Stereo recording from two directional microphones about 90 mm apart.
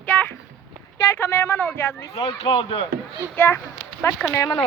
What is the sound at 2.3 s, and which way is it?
Speech, 75° left (ahead or behind).